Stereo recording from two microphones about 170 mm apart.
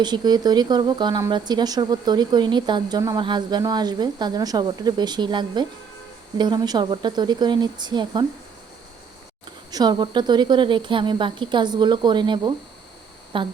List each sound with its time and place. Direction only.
0.0 s a woman's voice: 25° right (ahead or behind)
9.7 s a woman's voice: 25° right (ahead or behind)